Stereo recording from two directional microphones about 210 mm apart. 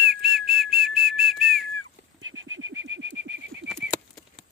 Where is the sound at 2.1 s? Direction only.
70° right (ahead or behind).